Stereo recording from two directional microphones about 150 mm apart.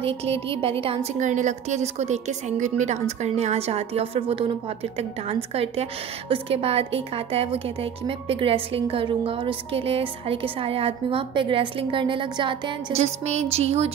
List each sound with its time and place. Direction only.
0.0 s a woman's voice: 40° right (ahead or behind)
1.2 s a woman's voice: 55° right (ahead or behind); by 12.7 s 35° right (ahead or behind)
12.9 s a woman's voice: 50° right (ahead or behind)